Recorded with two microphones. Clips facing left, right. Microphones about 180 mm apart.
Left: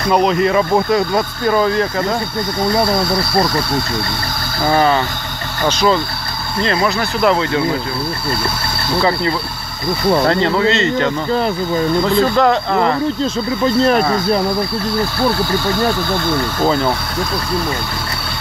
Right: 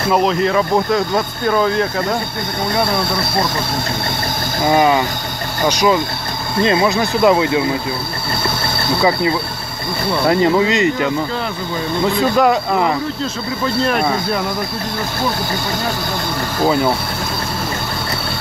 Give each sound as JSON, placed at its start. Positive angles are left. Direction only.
{"t": 0.1, "sound": "speech", "side_deg": 0}
{"t": 4.6, "sound": "speech", "side_deg": -15}
{"t": 10.2, "sound": "speech", "side_deg": -15}
{"t": 12.2, "sound": "speech", "side_deg": -10}
{"t": 16.5, "sound": "speech", "side_deg": -10}